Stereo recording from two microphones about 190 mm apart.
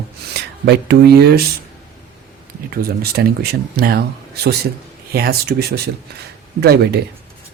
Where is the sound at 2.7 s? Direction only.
55° right (ahead or behind).